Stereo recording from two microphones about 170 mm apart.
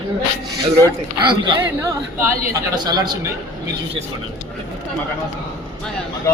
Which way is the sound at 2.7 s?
25° right (ahead or behind).